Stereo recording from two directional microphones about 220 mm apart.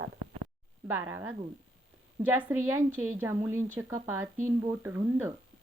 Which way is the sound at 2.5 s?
10° right (ahead or behind).